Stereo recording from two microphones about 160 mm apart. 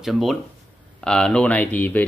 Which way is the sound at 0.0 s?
Centre (ahead or behind).